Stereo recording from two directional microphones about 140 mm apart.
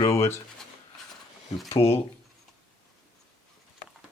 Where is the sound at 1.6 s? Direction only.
45° left (ahead or behind).